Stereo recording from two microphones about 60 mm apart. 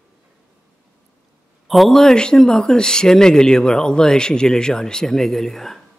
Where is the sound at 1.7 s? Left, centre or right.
Centre.